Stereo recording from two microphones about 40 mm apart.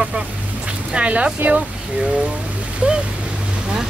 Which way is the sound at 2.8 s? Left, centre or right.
Right.